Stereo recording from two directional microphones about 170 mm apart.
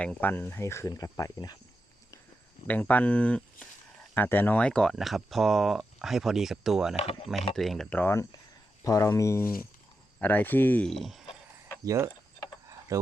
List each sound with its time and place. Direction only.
0.0 s speech: 10° left (ahead or behind)
2.6 s speech: 10° left (ahead or behind)
6.9 s speech: 35° left (ahead or behind)
7.5 s speech: centre (ahead or behind)
11.9 s speech: 20° right (ahead or behind)